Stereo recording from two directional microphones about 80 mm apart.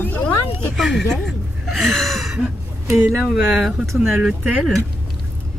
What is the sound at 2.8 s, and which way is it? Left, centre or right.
Speech, right.